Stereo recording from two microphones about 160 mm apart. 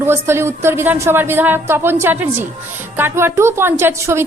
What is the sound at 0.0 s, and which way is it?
A woman's voice, 15° right (ahead or behind).